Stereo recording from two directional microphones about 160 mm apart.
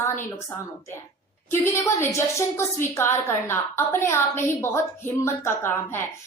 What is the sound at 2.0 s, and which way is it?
A woman's voice, 20° left (ahead or behind).